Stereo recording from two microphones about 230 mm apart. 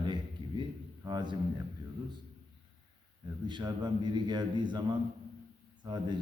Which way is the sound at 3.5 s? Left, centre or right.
Centre.